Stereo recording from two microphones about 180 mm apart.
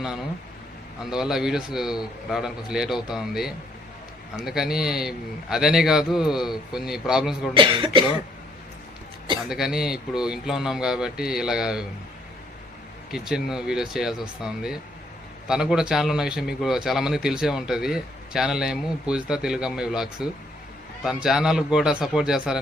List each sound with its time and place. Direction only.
0.0 s a man's voice: 5° right (ahead or behind)
7.5 s speech: 25° right (ahead or behind)
9.5 s a man's voice: 5° right (ahead or behind)
13.1 s a man's voice: 5° right (ahead or behind)